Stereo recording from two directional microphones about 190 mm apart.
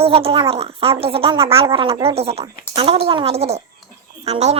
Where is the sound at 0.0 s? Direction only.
30° right (ahead or behind).